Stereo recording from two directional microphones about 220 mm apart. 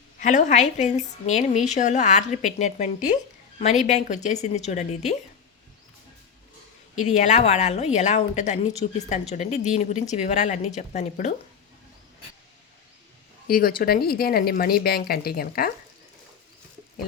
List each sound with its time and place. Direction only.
0.2 s speech: 35° left (ahead or behind)
7.0 s speech: 35° left (ahead or behind)
13.5 s speech: 40° left (ahead or behind)